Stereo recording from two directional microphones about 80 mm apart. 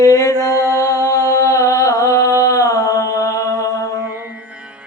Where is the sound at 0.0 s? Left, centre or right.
Left.